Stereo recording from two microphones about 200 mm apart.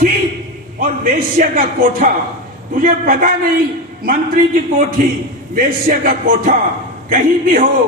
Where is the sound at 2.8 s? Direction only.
45° right (ahead or behind).